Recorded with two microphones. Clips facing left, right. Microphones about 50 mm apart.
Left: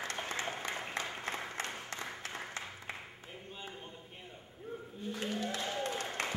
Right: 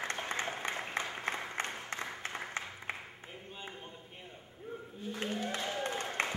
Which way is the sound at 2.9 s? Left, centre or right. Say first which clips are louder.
Right 4 dB; right.